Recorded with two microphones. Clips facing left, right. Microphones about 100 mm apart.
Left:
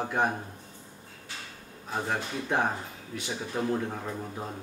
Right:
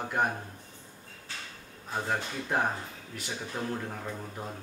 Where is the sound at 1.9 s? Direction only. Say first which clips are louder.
Left 1 dB; centre (ahead or behind).